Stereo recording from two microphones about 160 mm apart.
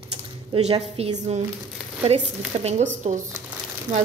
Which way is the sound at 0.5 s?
40° right (ahead or behind).